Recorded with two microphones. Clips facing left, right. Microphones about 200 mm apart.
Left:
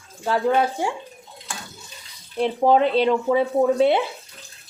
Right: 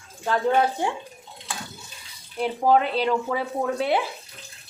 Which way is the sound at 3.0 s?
20° left (ahead or behind).